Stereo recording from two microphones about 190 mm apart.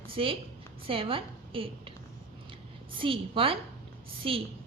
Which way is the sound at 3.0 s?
30° right (ahead or behind).